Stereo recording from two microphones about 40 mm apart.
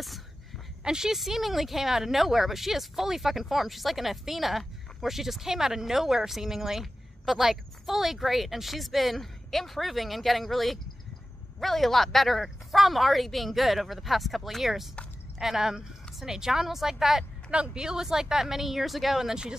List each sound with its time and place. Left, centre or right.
0.8 s speech: centre
1.1 s speech: centre
17.5 s speech: right; by 19.3 s centre